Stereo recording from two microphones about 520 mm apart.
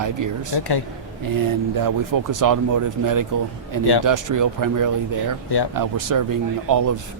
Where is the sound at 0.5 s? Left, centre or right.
Left.